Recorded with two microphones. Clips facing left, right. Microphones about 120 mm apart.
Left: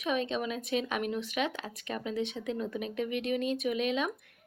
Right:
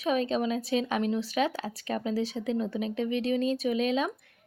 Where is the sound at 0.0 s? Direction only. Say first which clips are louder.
Right 4 dB; 35° right (ahead or behind).